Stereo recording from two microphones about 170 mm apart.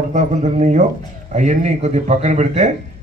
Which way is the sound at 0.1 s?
45° right (ahead or behind).